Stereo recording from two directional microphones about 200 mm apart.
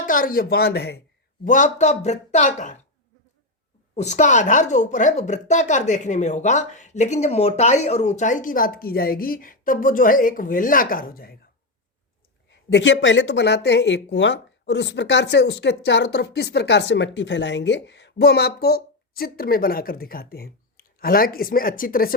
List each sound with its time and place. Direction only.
0.0 s speech: 45° left (ahead or behind)
1.5 s a woman's voice: 40° left (ahead or behind)
3.9 s a woman's voice: 35° left (ahead or behind)
12.5 s speech: 60° left (ahead or behind); by 22.1 s 45° left (ahead or behind)